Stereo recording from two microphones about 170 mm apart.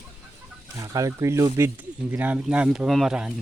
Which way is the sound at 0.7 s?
20° right (ahead or behind).